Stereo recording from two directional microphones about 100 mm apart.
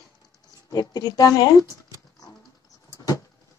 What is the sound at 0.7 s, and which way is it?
Speech, 40° left (ahead or behind).